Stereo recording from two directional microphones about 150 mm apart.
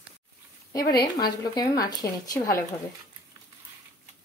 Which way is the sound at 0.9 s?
30° left (ahead or behind).